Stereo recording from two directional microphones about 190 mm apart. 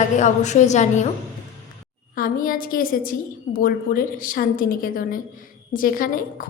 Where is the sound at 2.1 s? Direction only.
50° left (ahead or behind).